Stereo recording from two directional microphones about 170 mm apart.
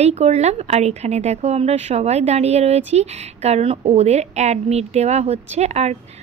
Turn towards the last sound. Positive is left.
turn(degrees=-40)  # may be behind; listen again after turning